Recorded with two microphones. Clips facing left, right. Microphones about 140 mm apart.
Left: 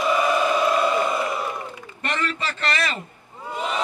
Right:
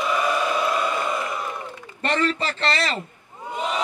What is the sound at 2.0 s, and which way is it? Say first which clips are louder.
Speech: right 4 dB; 30° right (ahead or behind).